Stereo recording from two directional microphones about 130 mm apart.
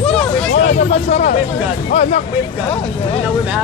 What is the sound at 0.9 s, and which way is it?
Speech, 55° left (ahead or behind).